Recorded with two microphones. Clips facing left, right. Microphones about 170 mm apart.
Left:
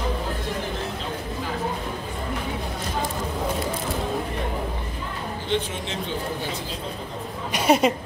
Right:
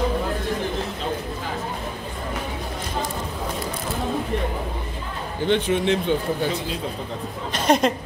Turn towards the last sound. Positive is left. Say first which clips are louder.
# even
turn(degrees=10)  # may be behind; listen again after turning